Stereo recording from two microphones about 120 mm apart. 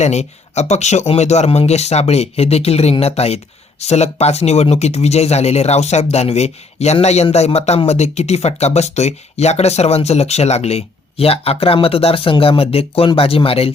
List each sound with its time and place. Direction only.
0.0 s speech: 70° left (ahead or behind); by 13.7 s 50° left (ahead or behind)